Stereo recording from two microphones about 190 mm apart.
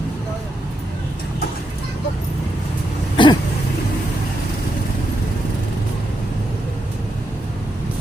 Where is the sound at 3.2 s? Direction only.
25° left (ahead or behind).